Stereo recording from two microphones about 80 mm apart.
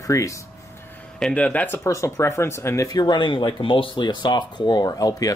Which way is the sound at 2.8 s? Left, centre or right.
Left.